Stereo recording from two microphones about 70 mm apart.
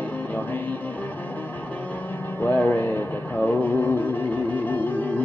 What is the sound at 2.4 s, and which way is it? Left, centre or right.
Speech, left.